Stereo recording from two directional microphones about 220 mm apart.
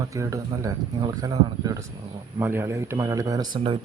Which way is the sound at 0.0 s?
15° right (ahead or behind).